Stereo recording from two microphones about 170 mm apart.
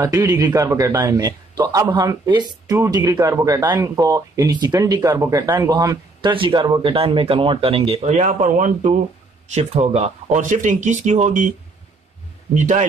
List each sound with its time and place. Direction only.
0.0 s speech: 20° right (ahead or behind); by 11.5 s 45° right (ahead or behind)
12.5 s speech: 45° right (ahead or behind)